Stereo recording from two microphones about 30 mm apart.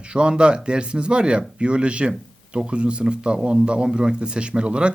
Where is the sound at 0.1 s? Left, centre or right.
Right.